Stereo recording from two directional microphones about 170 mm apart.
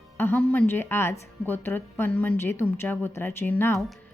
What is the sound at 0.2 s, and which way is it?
A woman's voice, 10° left (ahead or behind).